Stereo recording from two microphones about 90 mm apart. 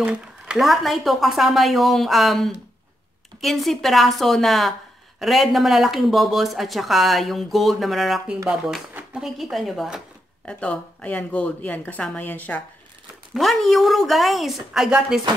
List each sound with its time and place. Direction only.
0.0 s a sound: 10° right (ahead or behind)
0.6 s speech: centre (ahead or behind)
10.4 s a woman's voice: 15° left (ahead or behind)
13.3 s speech: centre (ahead or behind)